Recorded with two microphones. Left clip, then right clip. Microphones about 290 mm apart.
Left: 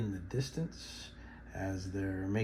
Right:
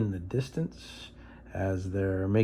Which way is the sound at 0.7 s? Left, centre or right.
Centre.